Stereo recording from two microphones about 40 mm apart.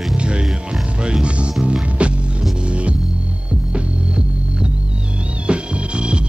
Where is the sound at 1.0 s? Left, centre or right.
Right.